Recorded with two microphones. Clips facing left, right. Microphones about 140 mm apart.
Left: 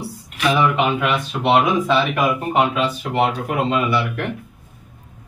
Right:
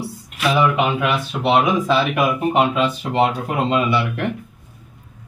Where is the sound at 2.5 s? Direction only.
25° right (ahead or behind).